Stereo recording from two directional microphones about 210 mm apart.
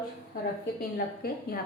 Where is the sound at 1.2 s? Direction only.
45° left (ahead or behind).